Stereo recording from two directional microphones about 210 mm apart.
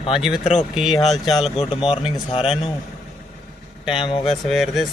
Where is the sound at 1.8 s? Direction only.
25° left (ahead or behind).